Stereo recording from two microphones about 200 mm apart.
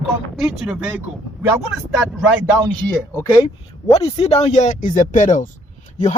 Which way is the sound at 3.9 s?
30° left (ahead or behind).